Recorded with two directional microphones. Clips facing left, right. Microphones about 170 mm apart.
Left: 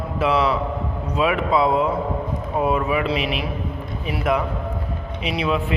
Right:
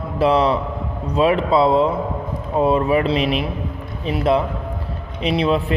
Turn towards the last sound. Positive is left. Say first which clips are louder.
# right 4 dB
turn(degrees=-30)  # may be behind; listen again after turning